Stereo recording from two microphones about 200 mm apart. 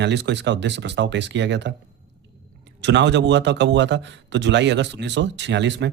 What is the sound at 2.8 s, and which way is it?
Speech, 60° right (ahead or behind).